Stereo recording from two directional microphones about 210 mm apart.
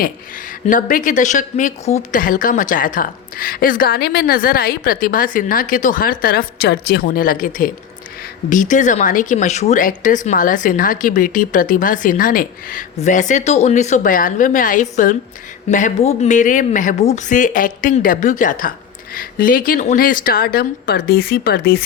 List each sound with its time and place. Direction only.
0.7 s a woman's voice: 40° left (ahead or behind)